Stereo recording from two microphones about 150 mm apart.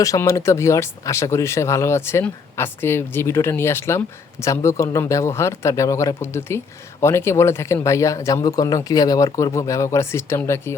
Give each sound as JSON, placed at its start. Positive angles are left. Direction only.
{"t": 0.0, "sound": "speech", "side_deg": 20}